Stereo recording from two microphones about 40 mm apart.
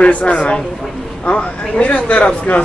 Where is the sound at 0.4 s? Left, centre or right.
Centre.